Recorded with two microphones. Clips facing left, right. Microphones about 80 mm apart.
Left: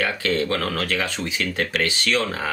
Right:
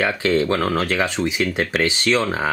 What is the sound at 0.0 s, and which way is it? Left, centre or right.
Speech, right.